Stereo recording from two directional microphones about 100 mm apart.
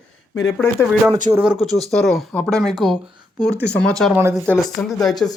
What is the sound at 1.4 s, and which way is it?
Speech, 5° right (ahead or behind).